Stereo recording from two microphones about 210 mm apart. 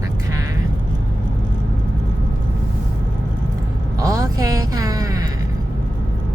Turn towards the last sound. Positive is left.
turn(degrees=-15)  # may be behind; listen again after turning